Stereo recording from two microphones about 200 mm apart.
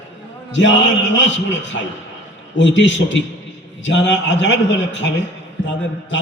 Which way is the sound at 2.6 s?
65° left (ahead or behind).